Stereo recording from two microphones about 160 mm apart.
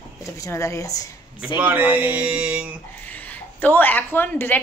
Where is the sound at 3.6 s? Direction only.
10° left (ahead or behind).